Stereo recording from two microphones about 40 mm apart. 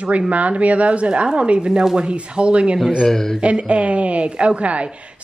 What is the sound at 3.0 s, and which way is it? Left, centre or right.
Speech, centre.